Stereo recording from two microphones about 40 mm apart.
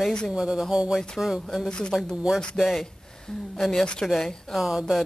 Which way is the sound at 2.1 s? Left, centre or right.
Centre.